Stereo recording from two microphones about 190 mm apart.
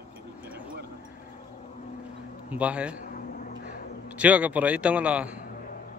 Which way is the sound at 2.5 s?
5° right (ahead or behind).